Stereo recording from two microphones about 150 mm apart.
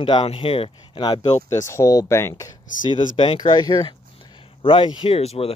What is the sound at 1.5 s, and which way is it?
Speech, 20° left (ahead or behind).